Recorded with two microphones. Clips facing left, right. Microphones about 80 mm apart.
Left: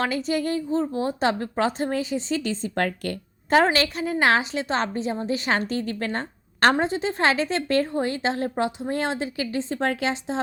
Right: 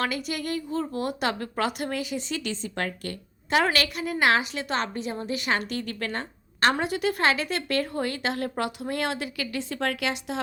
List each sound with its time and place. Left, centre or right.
0.0 s a woman's voice: left
3.5 s a woman's voice: left
6.8 s a woman's voice: left